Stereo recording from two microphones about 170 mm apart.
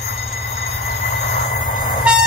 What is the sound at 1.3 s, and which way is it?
Train, 50° left (ahead or behind).